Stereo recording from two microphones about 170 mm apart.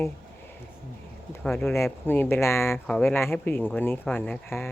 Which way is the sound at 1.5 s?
10° left (ahead or behind).